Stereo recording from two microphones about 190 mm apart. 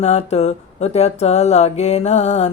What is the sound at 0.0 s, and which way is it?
Mantra, 35° left (ahead or behind).